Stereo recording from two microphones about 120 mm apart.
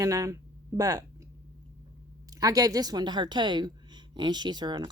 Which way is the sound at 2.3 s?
30° right (ahead or behind).